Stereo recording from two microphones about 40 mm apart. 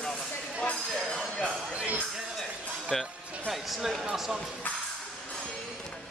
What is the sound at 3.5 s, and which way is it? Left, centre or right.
Speech, centre.